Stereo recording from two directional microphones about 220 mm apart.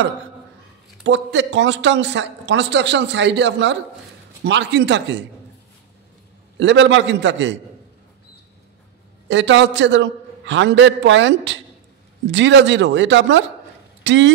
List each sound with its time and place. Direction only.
1.0 s a man's voice: 55° right (ahead or behind)
6.6 s a man's voice: 55° right (ahead or behind)
9.3 s a man's voice: 55° right (ahead or behind)